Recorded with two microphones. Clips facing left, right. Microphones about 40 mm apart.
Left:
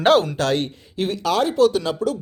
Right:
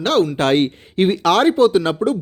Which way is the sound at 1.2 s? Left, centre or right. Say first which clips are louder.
Right 4 dB; right.